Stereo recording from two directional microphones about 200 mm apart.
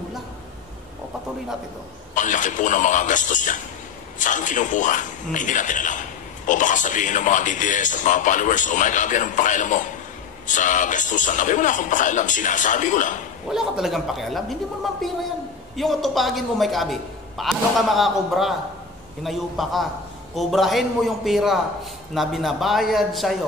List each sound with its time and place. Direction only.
2.1 s a man's voice: 40° left (ahead or behind)
13.5 s a woman's voice: centre (ahead or behind)